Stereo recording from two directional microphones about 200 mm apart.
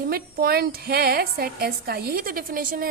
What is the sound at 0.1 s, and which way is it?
A woman's voice, 50° right (ahead or behind).